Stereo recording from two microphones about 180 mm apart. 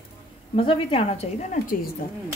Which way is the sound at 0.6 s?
30° left (ahead or behind).